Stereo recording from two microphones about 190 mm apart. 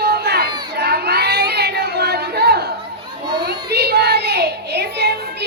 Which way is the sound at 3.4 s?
55° right (ahead or behind).